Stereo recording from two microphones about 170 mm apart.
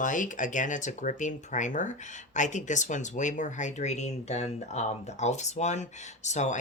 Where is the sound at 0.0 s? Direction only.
50° left (ahead or behind).